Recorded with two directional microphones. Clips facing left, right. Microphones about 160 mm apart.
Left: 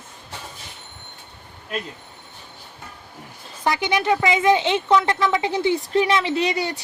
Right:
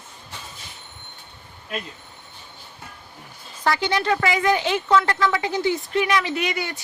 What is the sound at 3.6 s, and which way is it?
A woman's voice, 20° left (ahead or behind).